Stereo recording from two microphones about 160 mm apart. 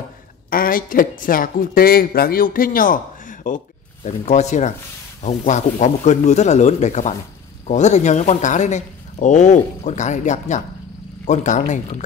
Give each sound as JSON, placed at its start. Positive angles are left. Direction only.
{"t": 0.5, "sound": "speech", "side_deg": 60}